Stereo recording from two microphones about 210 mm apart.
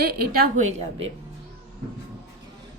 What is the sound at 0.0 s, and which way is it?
A woman's voice, 50° right (ahead or behind).